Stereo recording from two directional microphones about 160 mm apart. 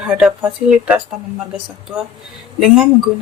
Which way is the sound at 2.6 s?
5° right (ahead or behind).